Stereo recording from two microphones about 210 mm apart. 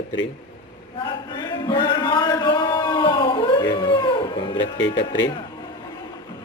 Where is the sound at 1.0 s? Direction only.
20° left (ahead or behind).